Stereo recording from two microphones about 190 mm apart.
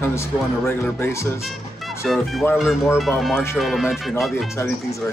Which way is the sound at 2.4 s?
15° left (ahead or behind).